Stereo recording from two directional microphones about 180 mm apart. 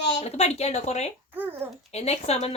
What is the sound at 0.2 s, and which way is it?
Speech, 35° left (ahead or behind).